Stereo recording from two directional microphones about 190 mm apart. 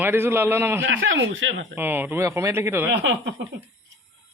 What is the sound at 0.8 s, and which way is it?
Speech, 90° right.